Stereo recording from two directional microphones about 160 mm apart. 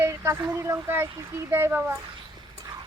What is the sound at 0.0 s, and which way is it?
Speech, 20° right (ahead or behind).